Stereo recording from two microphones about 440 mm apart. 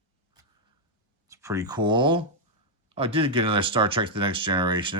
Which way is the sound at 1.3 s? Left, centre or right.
Centre.